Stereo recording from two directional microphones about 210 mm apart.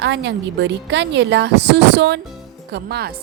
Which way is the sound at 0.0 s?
55° right (ahead or behind).